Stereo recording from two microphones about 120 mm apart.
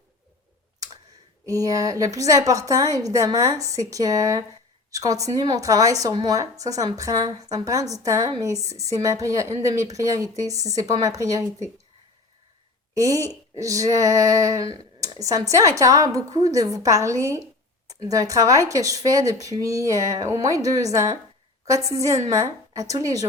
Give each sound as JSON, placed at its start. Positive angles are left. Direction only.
{"t": 1.5, "sound": "a woman's voice", "side_deg": -30}
{"t": 12.9, "sound": "a woman's voice", "side_deg": -30}